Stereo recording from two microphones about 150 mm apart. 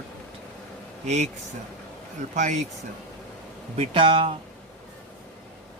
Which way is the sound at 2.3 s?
55° right (ahead or behind).